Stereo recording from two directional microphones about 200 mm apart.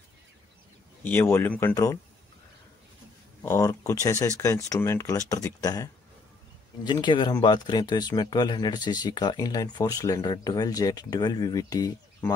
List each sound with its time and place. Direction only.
1.0 s speech: 10° left (ahead or behind)
3.4 s speech: 15° left (ahead or behind)